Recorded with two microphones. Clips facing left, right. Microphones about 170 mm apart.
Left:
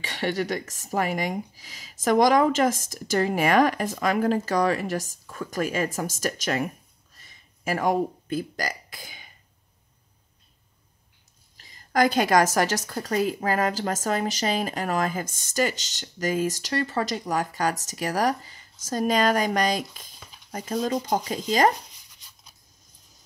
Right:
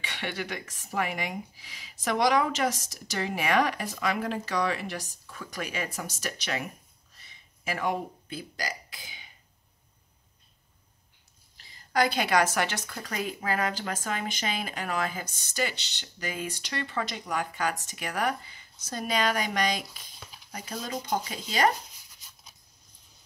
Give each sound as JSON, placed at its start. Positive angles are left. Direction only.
{"t": 0.0, "sound": "speech", "side_deg": 40}
{"t": 7.2, "sound": "a sound", "side_deg": 45}
{"t": 11.5, "sound": "a woman's voice", "side_deg": 45}